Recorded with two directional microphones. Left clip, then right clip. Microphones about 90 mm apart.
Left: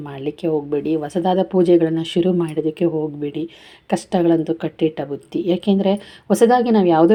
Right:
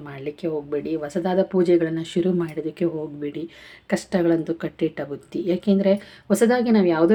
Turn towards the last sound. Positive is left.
turn(degrees=40)  # may be behind; listen again after turning